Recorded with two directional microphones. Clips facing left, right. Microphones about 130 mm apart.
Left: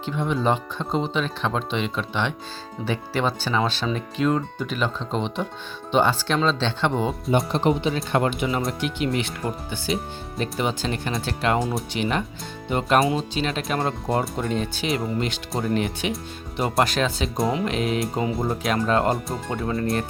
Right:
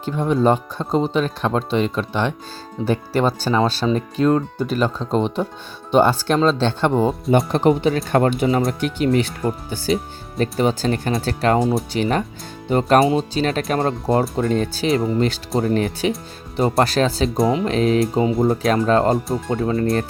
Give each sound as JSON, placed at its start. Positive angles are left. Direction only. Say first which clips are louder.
{"t": 0.0, "sound": "speech", "louder": "right 6 dB", "side_deg": -40}
{"t": 5.9, "sound": "speech", "louder": "right 5 dB", "side_deg": -45}
{"t": 17.2, "sound": "speech", "louder": "right 6 dB", "side_deg": 0}
{"t": 17.7, "sound": "speech", "louder": "right 7 dB", "side_deg": -35}